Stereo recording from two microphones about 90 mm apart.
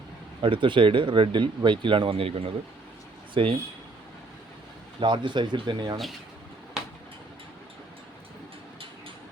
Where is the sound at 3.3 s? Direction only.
75° right (ahead or behind).